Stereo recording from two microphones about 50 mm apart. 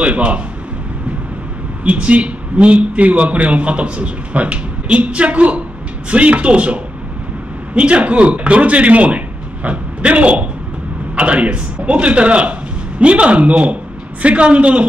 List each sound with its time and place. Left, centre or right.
0.0 s a man's voice: right
1.9 s a man's voice: right